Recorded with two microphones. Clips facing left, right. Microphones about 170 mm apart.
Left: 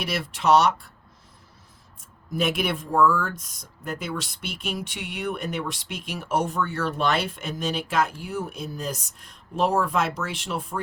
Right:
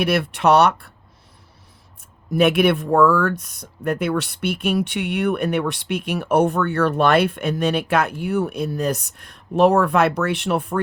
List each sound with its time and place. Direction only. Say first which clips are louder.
0.0 s speech: right 8 dB; 60° right (ahead or behind)
2.3 s speech: right 9 dB; 65° right (ahead or behind)